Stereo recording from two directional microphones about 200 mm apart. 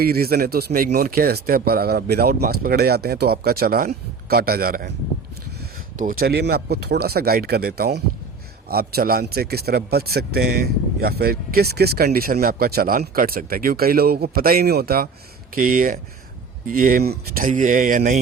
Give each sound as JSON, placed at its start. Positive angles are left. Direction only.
{"t": 0.0, "sound": "speech", "side_deg": -50}
{"t": 6.0, "sound": "speech", "side_deg": -45}